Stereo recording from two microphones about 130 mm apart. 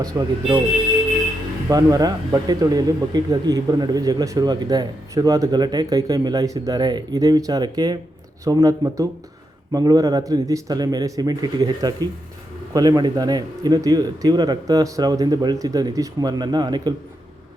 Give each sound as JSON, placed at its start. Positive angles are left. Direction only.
{"t": 0.1, "sound": "speech", "side_deg": -20}
{"t": 1.7, "sound": "speech", "side_deg": -30}